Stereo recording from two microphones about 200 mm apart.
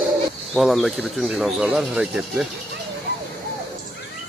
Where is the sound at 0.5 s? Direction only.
Centre (ahead or behind).